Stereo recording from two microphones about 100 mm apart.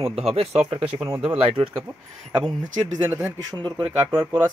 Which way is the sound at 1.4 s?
70° right (ahead or behind).